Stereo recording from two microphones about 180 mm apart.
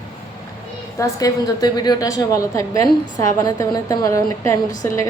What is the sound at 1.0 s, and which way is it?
A woman's voice, 20° left (ahead or behind).